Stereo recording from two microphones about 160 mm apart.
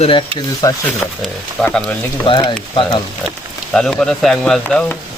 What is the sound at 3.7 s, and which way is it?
Speech, 5° left (ahead or behind).